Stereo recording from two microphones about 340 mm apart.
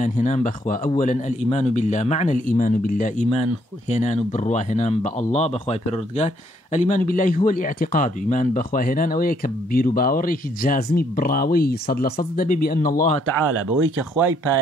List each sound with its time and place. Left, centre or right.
0.0 s speech: left
13.5 s speech: right